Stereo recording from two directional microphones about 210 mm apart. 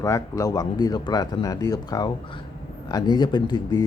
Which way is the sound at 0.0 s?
15° left (ahead or behind).